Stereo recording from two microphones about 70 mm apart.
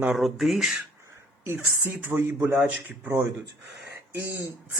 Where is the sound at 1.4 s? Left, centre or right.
Right.